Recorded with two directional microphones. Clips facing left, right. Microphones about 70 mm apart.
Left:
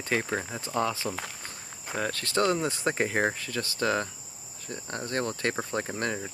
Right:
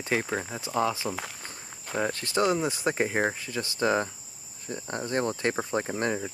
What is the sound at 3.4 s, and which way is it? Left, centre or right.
Cricket, centre.